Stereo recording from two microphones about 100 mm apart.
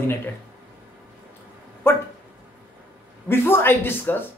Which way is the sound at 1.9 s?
20° left (ahead or behind).